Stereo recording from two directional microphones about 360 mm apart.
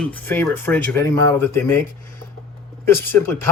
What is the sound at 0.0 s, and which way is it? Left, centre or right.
Speech, centre.